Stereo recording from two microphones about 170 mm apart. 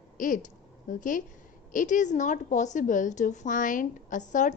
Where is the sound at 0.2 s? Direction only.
50° left (ahead or behind).